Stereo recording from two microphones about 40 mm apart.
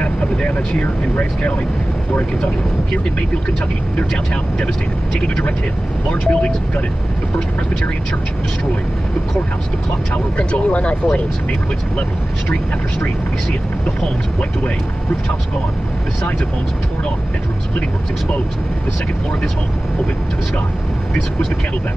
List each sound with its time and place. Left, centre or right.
6.2 s speech: left
10.1 s speech: left